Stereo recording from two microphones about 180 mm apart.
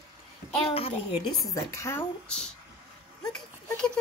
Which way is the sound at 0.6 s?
30° left (ahead or behind).